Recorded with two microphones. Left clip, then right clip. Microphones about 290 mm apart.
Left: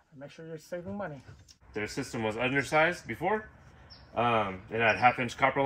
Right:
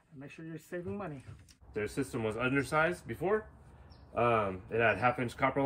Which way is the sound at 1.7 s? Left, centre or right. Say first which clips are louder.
Left 1 dB; centre.